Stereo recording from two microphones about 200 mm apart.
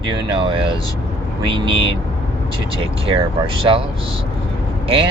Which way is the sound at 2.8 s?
25° right (ahead or behind).